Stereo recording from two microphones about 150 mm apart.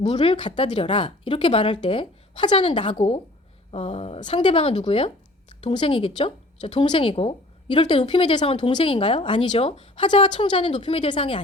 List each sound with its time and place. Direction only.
0.0 s speech: 40° left (ahead or behind)